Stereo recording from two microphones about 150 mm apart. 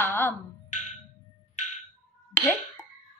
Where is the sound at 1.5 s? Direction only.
55° left (ahead or behind).